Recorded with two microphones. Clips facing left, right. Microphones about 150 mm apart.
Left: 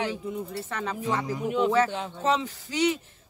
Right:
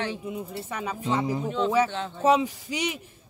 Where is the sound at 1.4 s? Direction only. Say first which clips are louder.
Left 4 dB; 10° left (ahead or behind).